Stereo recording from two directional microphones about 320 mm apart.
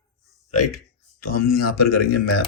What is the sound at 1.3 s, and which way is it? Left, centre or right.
Speech, left.